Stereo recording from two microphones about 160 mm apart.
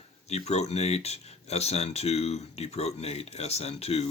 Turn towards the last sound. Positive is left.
turn(degrees=40)  # may be behind; listen again after turning